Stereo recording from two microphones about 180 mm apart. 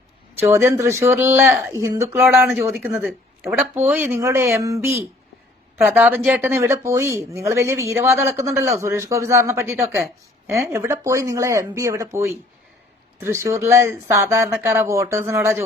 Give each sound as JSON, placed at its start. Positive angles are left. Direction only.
{"t": 0.3, "sound": "speech", "side_deg": -15}